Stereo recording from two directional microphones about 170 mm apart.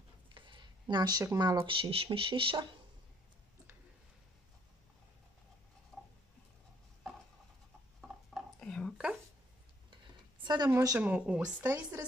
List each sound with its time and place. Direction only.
0.3 s speech: 30° right (ahead or behind)
5.9 s a sound: centre (ahead or behind)
8.4 s whispering: 5° left (ahead or behind)
10.4 s a woman's voice: 25° right (ahead or behind)
11.0 s speech: 10° right (ahead or behind)